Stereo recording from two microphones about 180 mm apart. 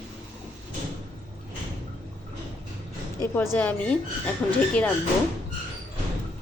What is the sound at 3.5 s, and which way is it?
Speech, 10° left (ahead or behind).